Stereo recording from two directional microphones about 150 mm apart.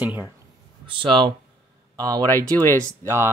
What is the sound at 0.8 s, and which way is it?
Speech, 35° right (ahead or behind).